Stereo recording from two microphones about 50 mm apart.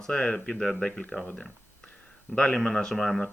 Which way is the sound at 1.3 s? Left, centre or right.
Centre.